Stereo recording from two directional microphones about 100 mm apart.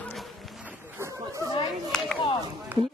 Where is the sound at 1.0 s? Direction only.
30° right (ahead or behind).